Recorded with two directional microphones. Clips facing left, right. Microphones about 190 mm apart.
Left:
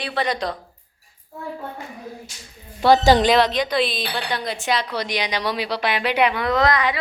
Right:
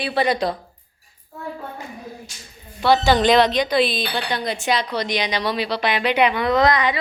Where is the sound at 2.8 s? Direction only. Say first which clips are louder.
Left 2 dB; 40° left (ahead or behind).